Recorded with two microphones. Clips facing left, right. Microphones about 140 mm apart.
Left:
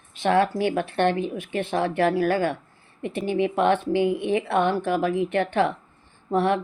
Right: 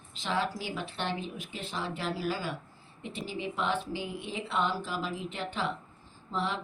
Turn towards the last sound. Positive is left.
turn(degrees=60)  # may be behind; listen again after turning